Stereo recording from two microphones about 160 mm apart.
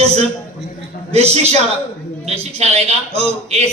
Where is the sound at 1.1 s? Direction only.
40° right (ahead or behind).